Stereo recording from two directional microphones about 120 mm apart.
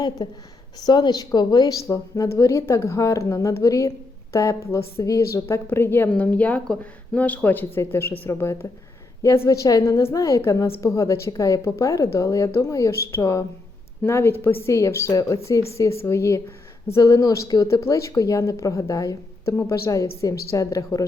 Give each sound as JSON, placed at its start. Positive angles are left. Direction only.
{"t": 0.2, "sound": "a woman's voice", "side_deg": 40}